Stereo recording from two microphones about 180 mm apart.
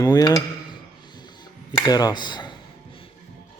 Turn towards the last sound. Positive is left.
turn(degrees=25)  # may be behind; listen again after turning